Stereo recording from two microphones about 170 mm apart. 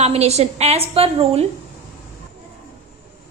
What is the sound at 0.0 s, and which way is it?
A woman's voice, 40° right (ahead or behind).